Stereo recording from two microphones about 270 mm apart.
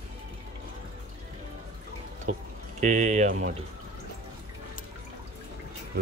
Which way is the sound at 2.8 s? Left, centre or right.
Right.